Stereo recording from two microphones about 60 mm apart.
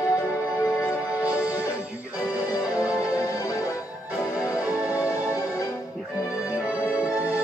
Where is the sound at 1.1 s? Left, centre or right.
Right.